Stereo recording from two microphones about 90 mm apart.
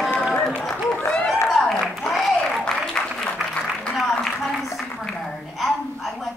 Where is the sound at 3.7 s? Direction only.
5° left (ahead or behind).